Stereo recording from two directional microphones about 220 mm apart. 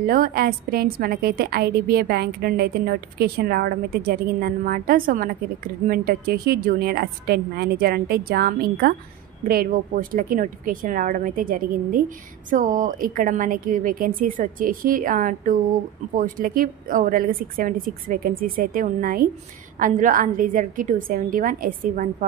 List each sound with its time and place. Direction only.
0.0 s a woman's voice: 40° right (ahead or behind)